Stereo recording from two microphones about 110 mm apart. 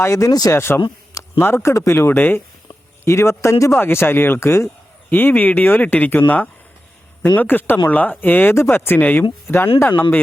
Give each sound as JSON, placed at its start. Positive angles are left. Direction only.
{"t": 0.0, "sound": "speech", "side_deg": 30}